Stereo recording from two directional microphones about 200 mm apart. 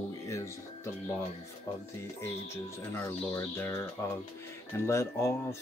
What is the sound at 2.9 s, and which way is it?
Speech, 10° left (ahead or behind).